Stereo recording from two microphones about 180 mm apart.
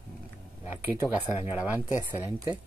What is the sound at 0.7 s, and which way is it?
Speech, 10° right (ahead or behind).